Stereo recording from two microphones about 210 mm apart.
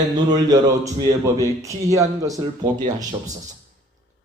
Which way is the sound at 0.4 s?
20° right (ahead or behind).